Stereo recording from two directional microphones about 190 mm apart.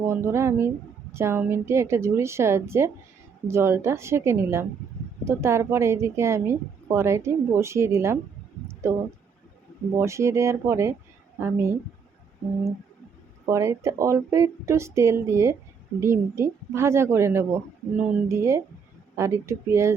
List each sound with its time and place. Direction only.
0.0 s a woman's voice: 15° right (ahead or behind)
8.6 s a sound: 15° right (ahead or behind)
9.9 s a woman's voice: 15° right (ahead or behind)
13.4 s a woman's voice: 15° right (ahead or behind)